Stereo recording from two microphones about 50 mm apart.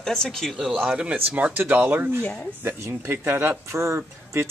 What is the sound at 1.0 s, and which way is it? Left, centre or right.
Speech, right.